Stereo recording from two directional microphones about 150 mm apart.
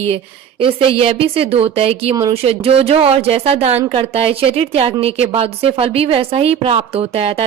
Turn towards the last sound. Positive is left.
turn(degrees=-40)  # may be behind; listen again after turning